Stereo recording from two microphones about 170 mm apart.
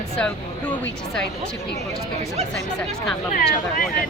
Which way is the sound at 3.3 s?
55° left (ahead or behind).